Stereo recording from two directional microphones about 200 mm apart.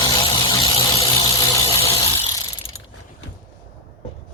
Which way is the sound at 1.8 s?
25° left (ahead or behind).